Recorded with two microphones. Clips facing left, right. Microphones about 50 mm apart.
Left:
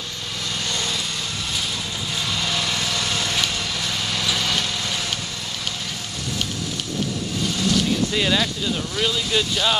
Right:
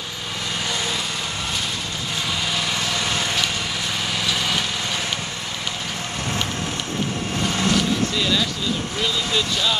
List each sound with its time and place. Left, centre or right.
2.5 s lawn mower: centre
4.2 s vehicle: centre
8.2 s a sound: left
9.0 s speech: centre